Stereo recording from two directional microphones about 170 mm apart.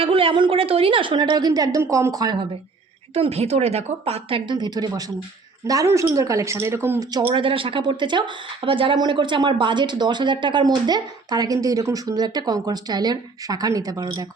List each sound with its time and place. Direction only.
0.0 s speech: 30° right (ahead or behind)
3.2 s a woman's voice: 40° right (ahead or behind); by 14.3 s 25° right (ahead or behind)